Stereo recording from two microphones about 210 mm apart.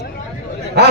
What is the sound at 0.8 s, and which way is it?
Speech, 50° right (ahead or behind).